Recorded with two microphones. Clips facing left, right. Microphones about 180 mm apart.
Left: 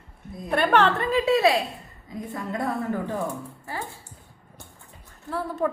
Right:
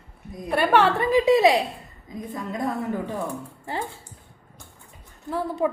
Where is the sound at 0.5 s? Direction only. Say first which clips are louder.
Right 1 dB; 10° right (ahead or behind).